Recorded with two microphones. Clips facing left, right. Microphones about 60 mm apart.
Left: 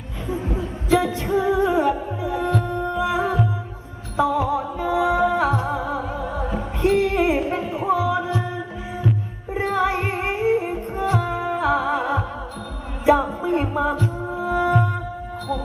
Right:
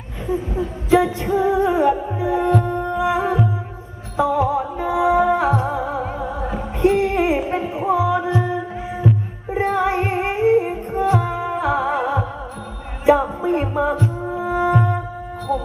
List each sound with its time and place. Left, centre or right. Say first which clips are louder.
0.9 s music: right 3 dB; right
9.5 s music: right 2 dB; right
13.4 s music: right 2 dB; right